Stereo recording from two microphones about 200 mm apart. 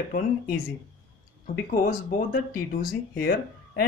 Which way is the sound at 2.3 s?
45° left (ahead or behind).